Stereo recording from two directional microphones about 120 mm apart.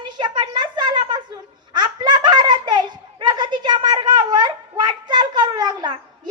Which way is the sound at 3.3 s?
40° right (ahead or behind).